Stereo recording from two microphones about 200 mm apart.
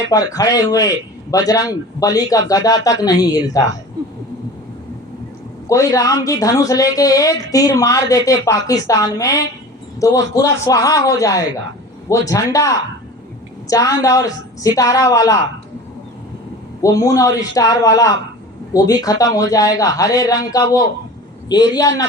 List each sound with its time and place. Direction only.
0.1 s a woman's voice: 15° left (ahead or behind)
5.6 s a woman's voice: 15° left (ahead or behind)
16.8 s a woman's voice: 15° left (ahead or behind)